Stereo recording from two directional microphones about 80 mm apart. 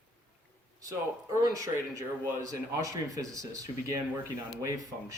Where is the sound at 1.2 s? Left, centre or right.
Right.